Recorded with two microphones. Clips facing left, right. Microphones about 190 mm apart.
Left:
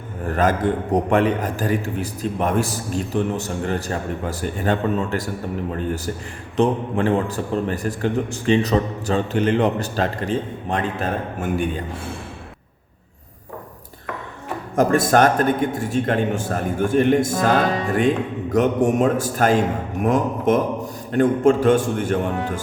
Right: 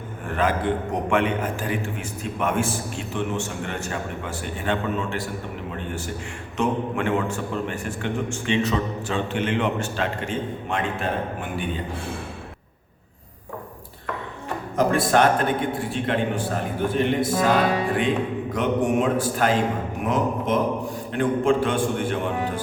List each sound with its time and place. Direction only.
0.3 s a man's voice: 40° left (ahead or behind)
6.6 s a man's voice: 35° left (ahead or behind)
14.8 s a man's voice: 45° left (ahead or behind)
18.5 s a man's voice: 45° left (ahead or behind)